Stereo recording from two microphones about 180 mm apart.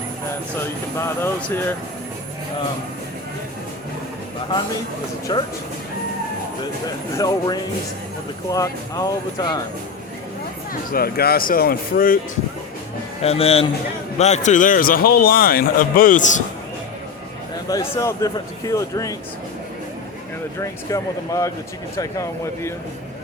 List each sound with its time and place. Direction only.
0.9 s speech: 15° left (ahead or behind)
5.3 s speech: 25° left (ahead or behind)
6.8 s speech: 20° left (ahead or behind)
10.9 s speech: 60° left (ahead or behind)
13.2 s a man's voice: 35° left (ahead or behind)
17.7 s speech: 15° left (ahead or behind)
20.6 s speech: 15° left (ahead or behind)